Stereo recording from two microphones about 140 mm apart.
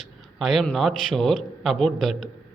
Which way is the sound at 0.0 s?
Centre (ahead or behind).